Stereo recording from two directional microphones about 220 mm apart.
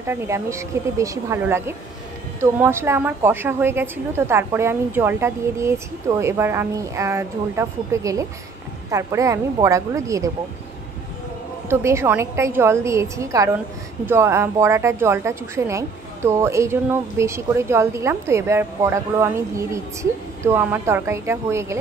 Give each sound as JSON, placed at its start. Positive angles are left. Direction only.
{"t": 0.0, "sound": "a woman's voice", "side_deg": -10}
{"t": 11.7, "sound": "a woman's voice", "side_deg": -10}